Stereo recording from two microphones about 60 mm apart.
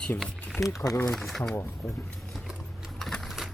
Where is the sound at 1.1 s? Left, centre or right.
Centre.